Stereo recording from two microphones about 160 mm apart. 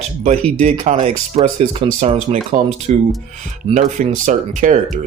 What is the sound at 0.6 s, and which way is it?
Speech, 45° right (ahead or behind).